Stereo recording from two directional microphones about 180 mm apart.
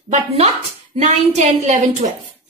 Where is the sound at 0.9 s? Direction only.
40° right (ahead or behind).